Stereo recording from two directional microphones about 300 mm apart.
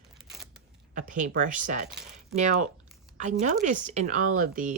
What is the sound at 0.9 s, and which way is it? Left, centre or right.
Speech, right.